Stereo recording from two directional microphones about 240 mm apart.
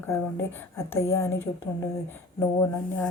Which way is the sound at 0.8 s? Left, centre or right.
Centre.